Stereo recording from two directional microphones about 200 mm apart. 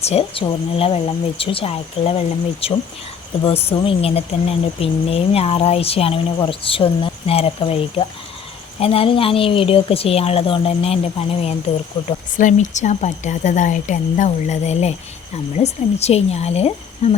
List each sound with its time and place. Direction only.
0.0 s speech: 30° left (ahead or behind)